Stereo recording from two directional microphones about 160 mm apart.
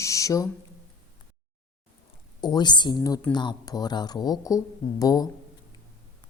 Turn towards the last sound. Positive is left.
turn(degrees=25)  # may be behind; listen again after turning